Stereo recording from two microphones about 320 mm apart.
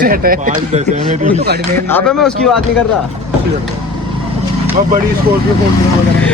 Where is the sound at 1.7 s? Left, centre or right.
Centre.